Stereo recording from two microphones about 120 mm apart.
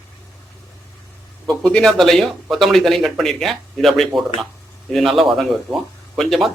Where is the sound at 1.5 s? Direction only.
5° left (ahead or behind).